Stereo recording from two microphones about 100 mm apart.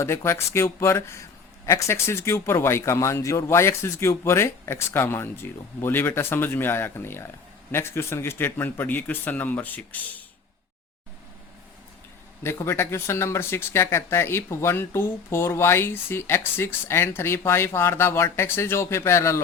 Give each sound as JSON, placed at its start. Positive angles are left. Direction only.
{"t": 0.0, "sound": "speech", "side_deg": 30}
{"t": 12.4, "sound": "speech", "side_deg": 25}